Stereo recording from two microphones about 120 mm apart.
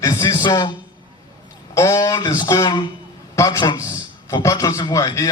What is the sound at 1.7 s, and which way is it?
A man's voice, 25° left (ahead or behind).